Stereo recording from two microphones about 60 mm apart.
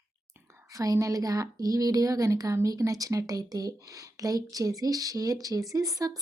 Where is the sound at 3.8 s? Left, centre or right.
Right.